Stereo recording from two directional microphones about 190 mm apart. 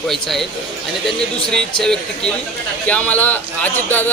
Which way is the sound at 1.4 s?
5° left (ahead or behind).